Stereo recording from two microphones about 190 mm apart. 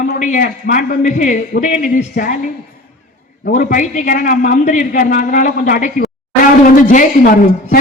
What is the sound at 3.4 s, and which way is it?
A man's voice, 45° left (ahead or behind).